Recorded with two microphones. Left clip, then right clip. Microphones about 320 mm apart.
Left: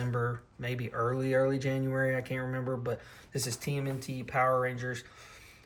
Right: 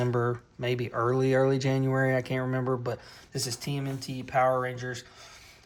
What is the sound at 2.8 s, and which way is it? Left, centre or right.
Speech, centre.